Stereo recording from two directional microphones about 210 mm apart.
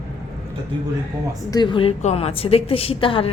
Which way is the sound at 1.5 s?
20° left (ahead or behind).